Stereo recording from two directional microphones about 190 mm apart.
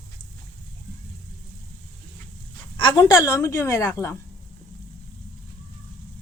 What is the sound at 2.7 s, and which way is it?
A woman's voice, 25° left (ahead or behind).